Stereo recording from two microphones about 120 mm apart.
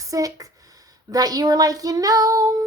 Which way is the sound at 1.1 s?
30° right (ahead or behind).